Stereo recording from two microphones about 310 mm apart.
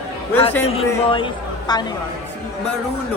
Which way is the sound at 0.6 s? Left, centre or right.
Centre.